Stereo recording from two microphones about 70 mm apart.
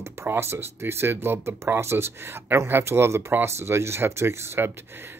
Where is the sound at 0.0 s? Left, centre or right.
Right.